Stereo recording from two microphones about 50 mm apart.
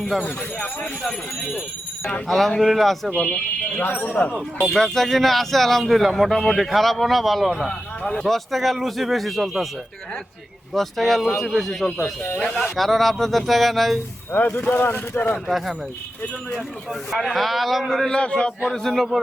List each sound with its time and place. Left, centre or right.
0.0 s music: centre
2.2 s speech: centre
3.1 s a man's voice: centre
3.8 s speech: left
4.7 s speech: centre
7.7 s speech: centre
8.2 s speech: centre
10.8 s speech: centre
14.3 s speech: left
15.4 s speech: centre
17.1 s a man's voice: centre; by 18.5 s left
18.6 s speech: centre